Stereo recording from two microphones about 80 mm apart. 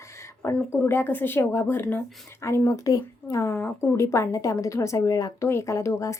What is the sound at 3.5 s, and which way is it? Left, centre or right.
Speech, left.